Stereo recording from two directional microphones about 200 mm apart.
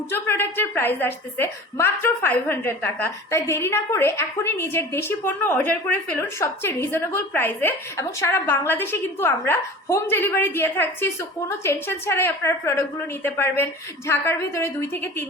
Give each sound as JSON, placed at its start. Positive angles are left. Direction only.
{"t": 0.1, "sound": "a woman's voice", "side_deg": 10}